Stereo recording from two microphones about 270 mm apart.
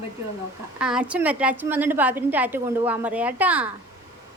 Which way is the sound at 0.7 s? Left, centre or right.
Centre.